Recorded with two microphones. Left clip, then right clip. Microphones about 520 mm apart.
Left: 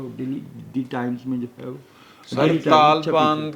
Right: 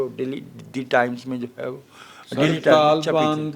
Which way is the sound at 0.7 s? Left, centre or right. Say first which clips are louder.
Right 7 dB; right.